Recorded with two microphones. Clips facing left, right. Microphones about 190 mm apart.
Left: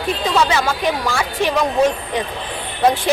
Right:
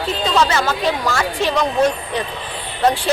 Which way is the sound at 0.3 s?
10° left (ahead or behind).